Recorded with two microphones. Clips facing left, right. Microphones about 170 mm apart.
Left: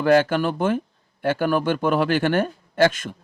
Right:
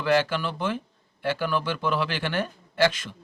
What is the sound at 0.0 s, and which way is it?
A man's voice, 50° left (ahead or behind).